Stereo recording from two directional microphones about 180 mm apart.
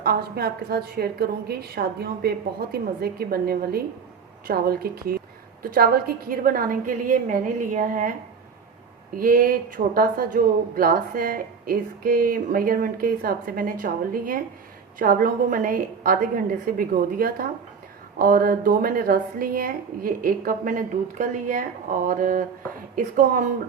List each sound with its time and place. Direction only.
0.0 s a woman's voice: 60° right (ahead or behind)
9.1 s speech: 50° right (ahead or behind)